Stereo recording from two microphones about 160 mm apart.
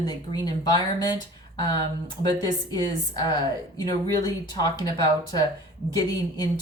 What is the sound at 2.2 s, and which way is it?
Speech, 25° left (ahead or behind).